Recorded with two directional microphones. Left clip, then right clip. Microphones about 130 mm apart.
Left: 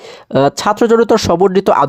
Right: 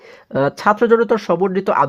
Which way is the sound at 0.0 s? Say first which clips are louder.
Left 6 dB; 45° left (ahead or behind).